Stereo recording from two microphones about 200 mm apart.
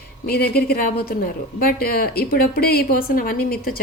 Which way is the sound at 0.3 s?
50° left (ahead or behind).